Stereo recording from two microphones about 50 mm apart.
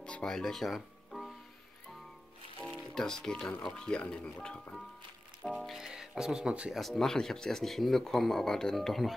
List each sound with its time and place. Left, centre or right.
0.0 s music: centre
2.8 s speech: centre
5.5 s speech: centre
5.8 s speech: centre
6.7 s speech: centre